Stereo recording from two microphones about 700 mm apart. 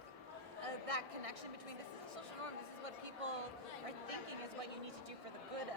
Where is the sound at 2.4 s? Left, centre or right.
Right.